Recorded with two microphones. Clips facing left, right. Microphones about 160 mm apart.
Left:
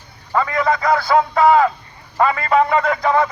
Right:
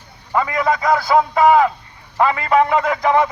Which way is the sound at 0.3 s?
10° right (ahead or behind).